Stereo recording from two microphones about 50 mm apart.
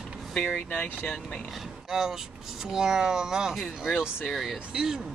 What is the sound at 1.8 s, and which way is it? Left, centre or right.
Speech, centre.